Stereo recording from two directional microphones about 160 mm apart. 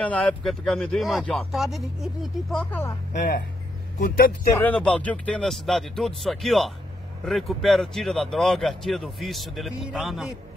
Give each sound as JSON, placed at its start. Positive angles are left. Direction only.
{"t": 0.0, "sound": "speech", "side_deg": 10}
{"t": 2.5, "sound": "speech", "side_deg": 10}
{"t": 3.1, "sound": "speech", "side_deg": 60}
{"t": 4.6, "sound": "speech", "side_deg": 10}